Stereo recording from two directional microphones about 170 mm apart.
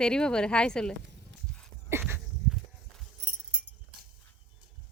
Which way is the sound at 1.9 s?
15° right (ahead or behind).